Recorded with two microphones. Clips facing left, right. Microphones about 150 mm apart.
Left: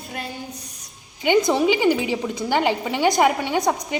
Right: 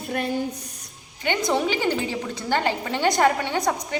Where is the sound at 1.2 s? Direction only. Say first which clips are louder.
Left 5 dB; 10° left (ahead or behind).